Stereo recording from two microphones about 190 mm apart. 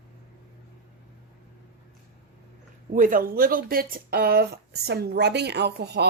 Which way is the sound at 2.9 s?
45° right (ahead or behind).